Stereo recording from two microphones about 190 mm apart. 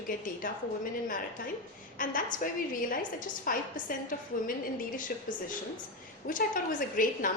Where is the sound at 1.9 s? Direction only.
45° left (ahead or behind).